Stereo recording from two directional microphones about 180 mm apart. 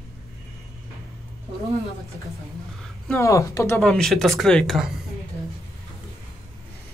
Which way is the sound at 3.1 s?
15° left (ahead or behind).